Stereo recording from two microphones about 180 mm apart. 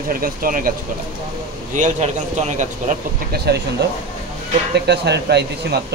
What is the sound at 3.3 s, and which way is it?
Speech, 65° right (ahead or behind).